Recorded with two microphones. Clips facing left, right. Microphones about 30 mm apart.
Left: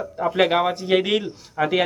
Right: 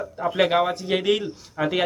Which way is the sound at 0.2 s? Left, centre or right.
Centre.